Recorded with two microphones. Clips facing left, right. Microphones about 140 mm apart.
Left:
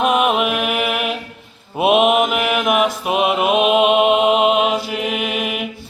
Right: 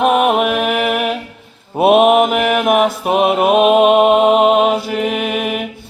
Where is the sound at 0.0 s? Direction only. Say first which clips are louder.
Right 3 dB; 50° right (ahead or behind).